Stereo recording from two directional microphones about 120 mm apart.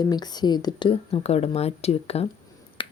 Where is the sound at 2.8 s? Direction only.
45° left (ahead or behind).